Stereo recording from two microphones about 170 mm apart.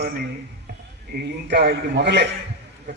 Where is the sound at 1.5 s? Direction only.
85° right.